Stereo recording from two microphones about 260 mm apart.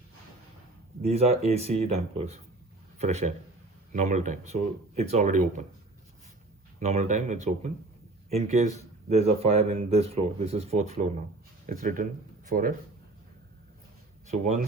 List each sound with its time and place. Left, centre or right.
1.0 s speech: right
6.7 s speech: right
14.3 s speech: right